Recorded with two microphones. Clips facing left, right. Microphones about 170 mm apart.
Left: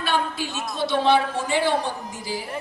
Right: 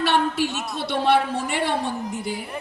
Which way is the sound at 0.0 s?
70° right (ahead or behind).